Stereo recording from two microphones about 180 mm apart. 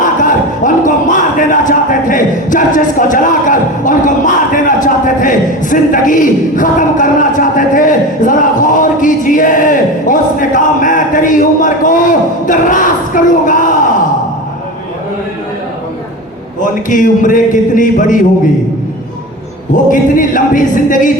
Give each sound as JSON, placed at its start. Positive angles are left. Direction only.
{"t": 0.0, "sound": "a sound", "side_deg": 45}
{"t": 4.5, "sound": "a man's voice", "side_deg": 45}
{"t": 16.9, "sound": "a man's voice", "side_deg": 45}
{"t": 19.7, "sound": "a man's voice", "side_deg": 45}